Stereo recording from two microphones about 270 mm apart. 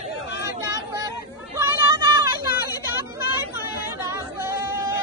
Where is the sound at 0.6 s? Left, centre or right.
Centre.